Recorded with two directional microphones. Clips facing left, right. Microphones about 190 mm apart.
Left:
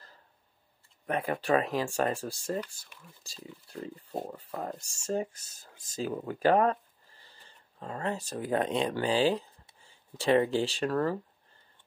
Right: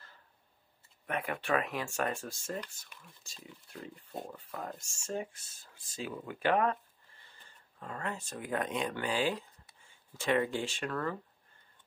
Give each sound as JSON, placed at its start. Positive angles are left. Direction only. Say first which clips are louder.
{"t": 1.0, "sound": "speech", "louder": "left 5 dB", "side_deg": 35}